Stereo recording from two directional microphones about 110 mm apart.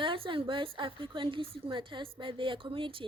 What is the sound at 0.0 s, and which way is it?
A woman's voice, 50° right (ahead or behind).